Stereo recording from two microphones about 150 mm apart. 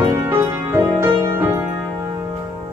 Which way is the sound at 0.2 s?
15° right (ahead or behind).